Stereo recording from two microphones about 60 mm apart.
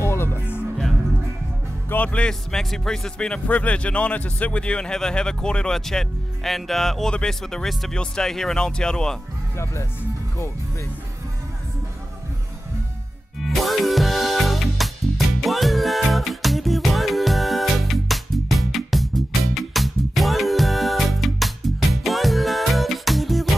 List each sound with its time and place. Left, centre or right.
0.0 s music: left
2.0 s speech: centre
3.2 s speech: left
13.4 s music: centre